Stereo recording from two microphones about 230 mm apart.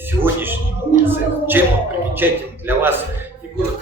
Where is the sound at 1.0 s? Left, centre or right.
Centre.